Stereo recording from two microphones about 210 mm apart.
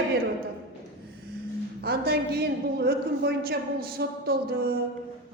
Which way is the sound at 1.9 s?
50° right (ahead or behind).